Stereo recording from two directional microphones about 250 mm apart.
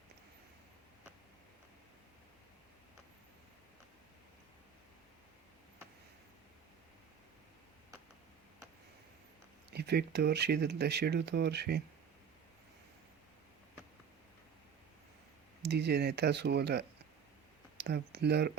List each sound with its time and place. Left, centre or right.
9.7 s speech: right
15.7 s speech: right
17.8 s speech: right